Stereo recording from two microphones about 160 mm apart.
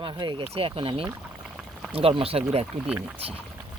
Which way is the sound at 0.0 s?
30° right (ahead or behind).